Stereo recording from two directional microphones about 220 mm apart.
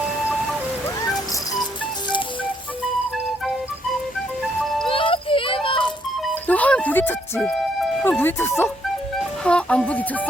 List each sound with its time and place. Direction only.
4.6 s music: centre (ahead or behind)
4.9 s music: 25° left (ahead or behind)
6.2 s music: 5° left (ahead or behind)
9.1 s speech: 5° left (ahead or behind)